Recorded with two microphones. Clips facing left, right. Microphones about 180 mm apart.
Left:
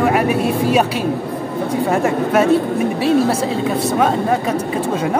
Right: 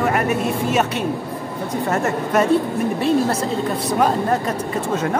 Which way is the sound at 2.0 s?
10° left (ahead or behind).